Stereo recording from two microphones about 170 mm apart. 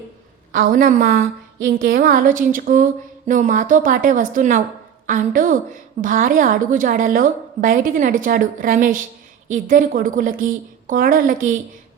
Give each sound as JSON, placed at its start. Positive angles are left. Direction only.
{"t": 0.5, "sound": "a woman's voice", "side_deg": -60}